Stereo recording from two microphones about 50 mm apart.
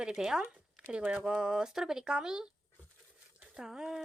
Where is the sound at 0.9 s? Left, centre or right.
Right.